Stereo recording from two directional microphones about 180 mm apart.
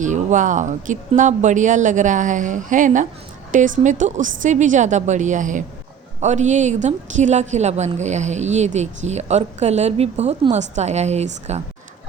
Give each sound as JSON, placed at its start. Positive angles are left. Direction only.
{"t": 0.0, "sound": "a woman's voice", "side_deg": -45}